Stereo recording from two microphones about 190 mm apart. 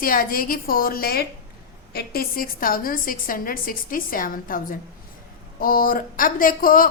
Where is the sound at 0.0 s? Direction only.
50° left (ahead or behind).